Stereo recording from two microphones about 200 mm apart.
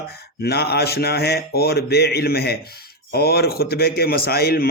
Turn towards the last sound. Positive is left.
turn(degrees=50)  # may be behind; listen again after turning